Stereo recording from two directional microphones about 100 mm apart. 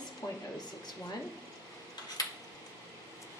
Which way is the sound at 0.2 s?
30° left (ahead or behind).